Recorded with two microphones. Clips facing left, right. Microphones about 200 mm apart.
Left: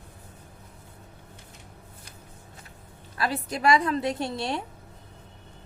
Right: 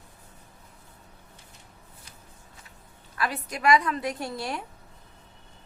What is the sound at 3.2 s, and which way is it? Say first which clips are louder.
A woman's voice: left 2 dB; 30° left (ahead or behind).